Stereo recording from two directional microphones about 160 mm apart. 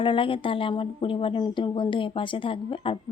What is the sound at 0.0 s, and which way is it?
Speech, 30° left (ahead or behind).